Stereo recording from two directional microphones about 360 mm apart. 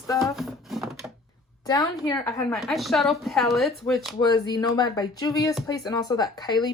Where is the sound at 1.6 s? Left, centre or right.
Centre.